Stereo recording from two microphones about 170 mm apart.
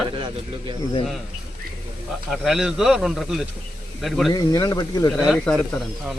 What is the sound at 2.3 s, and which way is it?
A man's voice, centre (ahead or behind).